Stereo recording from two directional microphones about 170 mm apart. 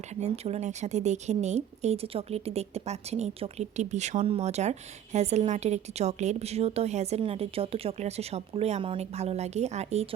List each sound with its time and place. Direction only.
0.2 s speech: 40° right (ahead or behind)